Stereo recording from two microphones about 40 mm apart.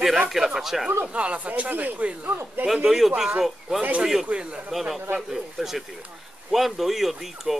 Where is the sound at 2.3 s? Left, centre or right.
Right.